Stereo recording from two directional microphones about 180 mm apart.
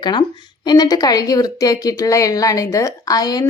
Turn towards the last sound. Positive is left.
turn(degrees=20)  # may be behind; listen again after turning